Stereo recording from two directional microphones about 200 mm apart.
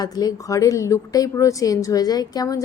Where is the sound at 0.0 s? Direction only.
20° left (ahead or behind).